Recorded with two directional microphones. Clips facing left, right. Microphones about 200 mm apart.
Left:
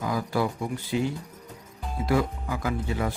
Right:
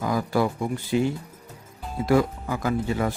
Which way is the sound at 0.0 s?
50° right (ahead or behind).